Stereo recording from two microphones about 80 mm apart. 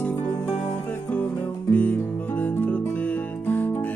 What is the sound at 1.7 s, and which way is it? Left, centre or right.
Music, left.